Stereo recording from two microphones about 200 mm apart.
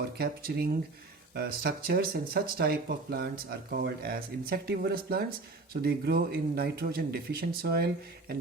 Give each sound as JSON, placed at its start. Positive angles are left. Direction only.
{"t": 0.0, "sound": "speech", "side_deg": -50}